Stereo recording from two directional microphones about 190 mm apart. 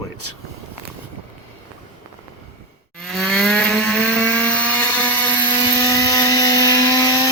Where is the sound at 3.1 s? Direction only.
Centre (ahead or behind).